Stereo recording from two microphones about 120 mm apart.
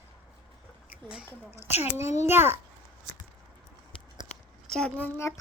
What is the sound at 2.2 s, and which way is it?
Speech, 20° right (ahead or behind).